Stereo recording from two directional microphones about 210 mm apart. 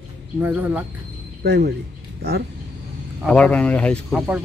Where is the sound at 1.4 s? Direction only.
50° right (ahead or behind).